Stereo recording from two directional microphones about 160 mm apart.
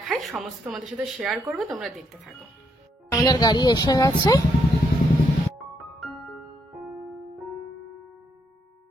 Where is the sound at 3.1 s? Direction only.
25° left (ahead or behind).